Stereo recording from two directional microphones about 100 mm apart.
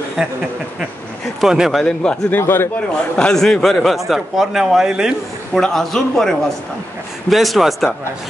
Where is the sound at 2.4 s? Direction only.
25° left (ahead or behind).